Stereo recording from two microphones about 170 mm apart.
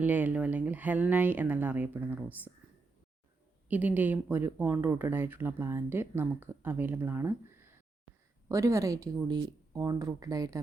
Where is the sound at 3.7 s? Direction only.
10° right (ahead or behind).